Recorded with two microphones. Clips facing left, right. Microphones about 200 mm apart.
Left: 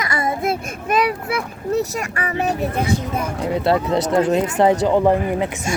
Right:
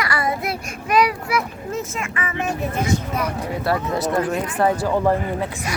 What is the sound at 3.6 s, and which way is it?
Speech, 25° left (ahead or behind).